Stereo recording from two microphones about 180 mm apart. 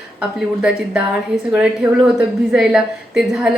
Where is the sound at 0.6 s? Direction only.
5° right (ahead or behind).